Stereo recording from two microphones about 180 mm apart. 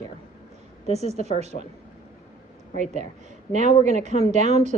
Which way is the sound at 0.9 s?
35° right (ahead or behind).